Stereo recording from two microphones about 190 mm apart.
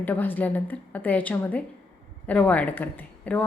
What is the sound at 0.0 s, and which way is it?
A woman's voice, 10° left (ahead or behind).